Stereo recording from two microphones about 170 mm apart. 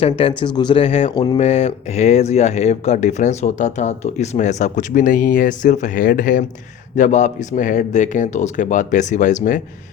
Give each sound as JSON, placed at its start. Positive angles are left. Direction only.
{"t": 0.0, "sound": "speech", "side_deg": 35}
{"t": 1.1, "sound": "speech", "side_deg": 25}
{"t": 1.4, "sound": "speech", "side_deg": 40}